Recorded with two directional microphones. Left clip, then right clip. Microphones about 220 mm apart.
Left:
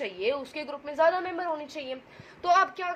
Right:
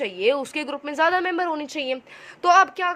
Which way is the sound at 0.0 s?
40° right (ahead or behind).